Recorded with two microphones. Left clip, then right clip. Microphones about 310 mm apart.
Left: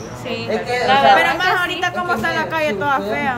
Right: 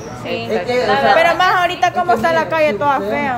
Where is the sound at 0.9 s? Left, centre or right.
Left.